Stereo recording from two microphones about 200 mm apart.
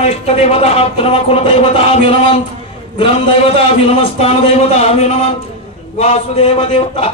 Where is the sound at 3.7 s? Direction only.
30° left (ahead or behind).